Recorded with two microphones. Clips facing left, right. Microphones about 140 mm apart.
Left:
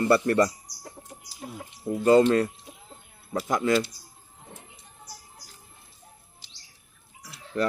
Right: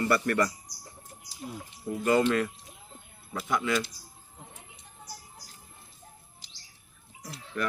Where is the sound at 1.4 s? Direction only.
80° left.